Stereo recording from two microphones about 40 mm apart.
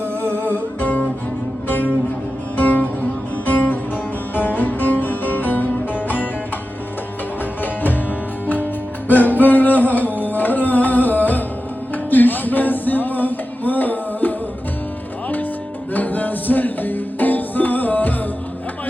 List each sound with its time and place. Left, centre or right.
0.4 s music: left
7.6 s music: left
9.0 s music: left
15.9 s music: left